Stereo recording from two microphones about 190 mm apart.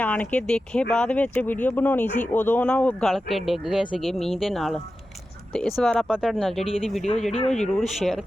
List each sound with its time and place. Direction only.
0.0 s speech: 10° left (ahead or behind)
7.3 s speech: 35° left (ahead or behind)
7.6 s speech: centre (ahead or behind)